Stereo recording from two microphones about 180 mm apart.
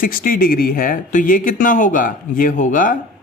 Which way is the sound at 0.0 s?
55° left (ahead or behind).